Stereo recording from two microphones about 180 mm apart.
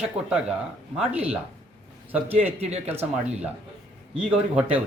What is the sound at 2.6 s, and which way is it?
Speech, 35° right (ahead or behind).